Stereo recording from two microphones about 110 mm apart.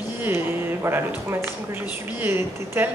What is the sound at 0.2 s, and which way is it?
A woman's voice, 20° right (ahead or behind).